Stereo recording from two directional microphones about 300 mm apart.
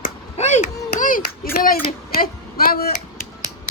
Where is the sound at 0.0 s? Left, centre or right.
Left.